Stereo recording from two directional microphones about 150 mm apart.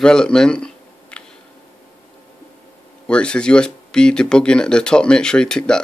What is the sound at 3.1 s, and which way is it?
Speech, 5° left (ahead or behind).